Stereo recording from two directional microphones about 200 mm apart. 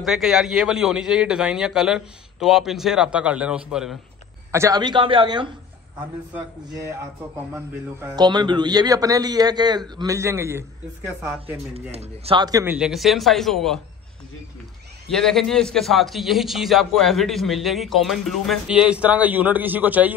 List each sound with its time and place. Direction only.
0.0 s a man's voice: centre (ahead or behind)
4.5 s a man's voice: 15° right (ahead or behind)
8.2 s a man's voice: 20° right (ahead or behind)
11.7 s a man's voice: 30° right (ahead or behind)
12.7 s a man's voice: centre (ahead or behind)
15.0 s a man's voice: centre (ahead or behind)